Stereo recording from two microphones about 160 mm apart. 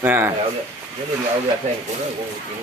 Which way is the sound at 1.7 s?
45° right (ahead or behind).